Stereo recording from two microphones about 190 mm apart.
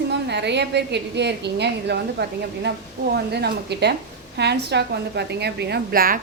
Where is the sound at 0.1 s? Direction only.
65° right (ahead or behind).